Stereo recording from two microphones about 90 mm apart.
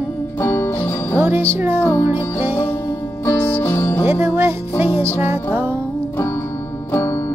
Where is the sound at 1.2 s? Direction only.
25° right (ahead or behind).